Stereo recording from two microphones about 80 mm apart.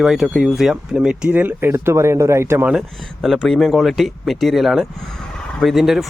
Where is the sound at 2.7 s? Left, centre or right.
Centre.